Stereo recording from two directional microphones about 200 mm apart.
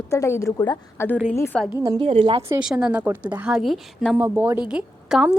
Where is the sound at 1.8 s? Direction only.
20° right (ahead or behind).